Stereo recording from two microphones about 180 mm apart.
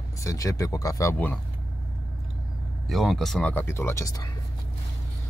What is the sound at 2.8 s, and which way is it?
Speech, centre (ahead or behind).